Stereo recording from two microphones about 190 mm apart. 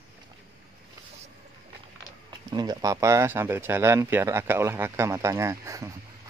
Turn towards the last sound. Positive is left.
turn(degrees=-15)  # may be behind; listen again after turning